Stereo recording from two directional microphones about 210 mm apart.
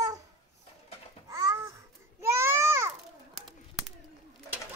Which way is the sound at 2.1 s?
10° right (ahead or behind).